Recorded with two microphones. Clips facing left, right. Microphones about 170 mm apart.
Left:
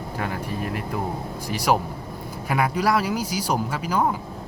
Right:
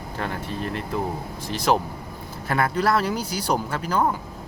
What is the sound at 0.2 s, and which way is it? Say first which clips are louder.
Speech: even; 10° left (ahead or behind).